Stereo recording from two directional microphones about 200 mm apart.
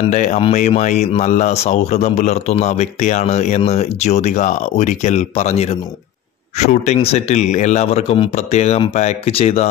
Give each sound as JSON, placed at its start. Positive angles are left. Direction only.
{"t": 0.1, "sound": "speech", "side_deg": 35}